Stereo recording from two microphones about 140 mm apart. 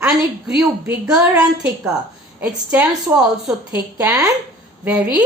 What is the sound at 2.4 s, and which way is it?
Speech, 15° right (ahead or behind).